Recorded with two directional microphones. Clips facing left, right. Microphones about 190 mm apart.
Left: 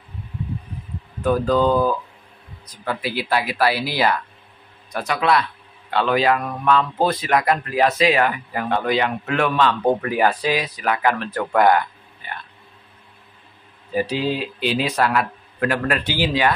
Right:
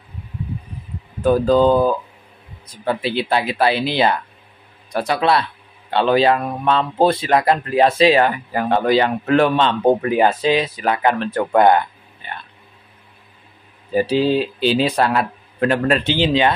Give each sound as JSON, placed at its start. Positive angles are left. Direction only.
{"t": 1.2, "sound": "a man's voice", "side_deg": -30}
{"t": 13.9, "sound": "a man's voice", "side_deg": -30}